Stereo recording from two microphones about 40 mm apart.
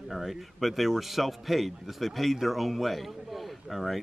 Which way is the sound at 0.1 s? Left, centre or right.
Centre.